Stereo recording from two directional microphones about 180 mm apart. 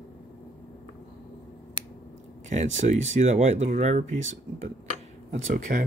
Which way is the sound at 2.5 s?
40° right (ahead or behind).